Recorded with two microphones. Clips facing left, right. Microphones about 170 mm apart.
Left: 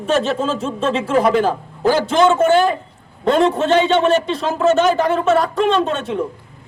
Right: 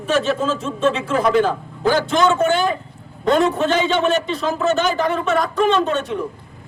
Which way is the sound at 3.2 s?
30° left (ahead or behind).